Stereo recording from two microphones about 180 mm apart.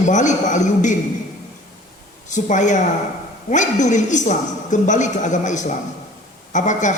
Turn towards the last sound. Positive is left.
turn(degrees=45)  # may be behind; listen again after turning